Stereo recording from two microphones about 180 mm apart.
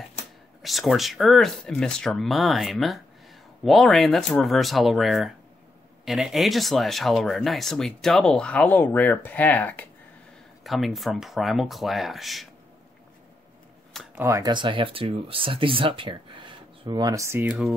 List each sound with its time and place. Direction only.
0.6 s speech: centre (ahead or behind)
14.1 s speech: 15° right (ahead or behind)